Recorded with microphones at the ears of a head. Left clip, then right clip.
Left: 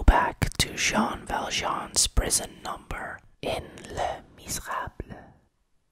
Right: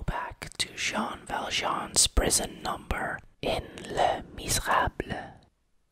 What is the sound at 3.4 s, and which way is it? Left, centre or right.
Speech, centre.